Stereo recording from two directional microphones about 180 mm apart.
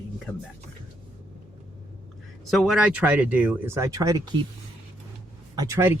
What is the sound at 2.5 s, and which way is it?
Speech, centre (ahead or behind).